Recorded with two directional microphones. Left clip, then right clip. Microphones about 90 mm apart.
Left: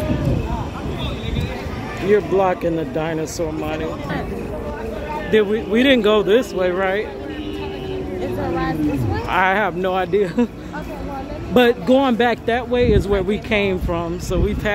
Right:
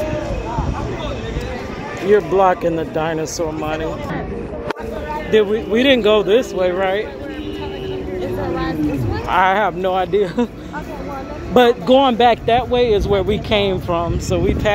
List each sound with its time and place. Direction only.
2.0 s speech: 35° left (ahead or behind)
5.3 s speech: 35° left (ahead or behind)
8.2 s a sound: 20° left (ahead or behind)
9.3 s speech: 40° left (ahead or behind)
10.1 s speech: 40° left (ahead or behind)
11.5 s speech: 30° left (ahead or behind)